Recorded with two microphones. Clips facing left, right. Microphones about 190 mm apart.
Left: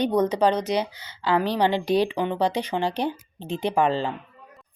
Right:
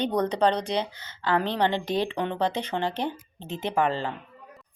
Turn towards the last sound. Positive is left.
turn(degrees=15)  # may be behind; listen again after turning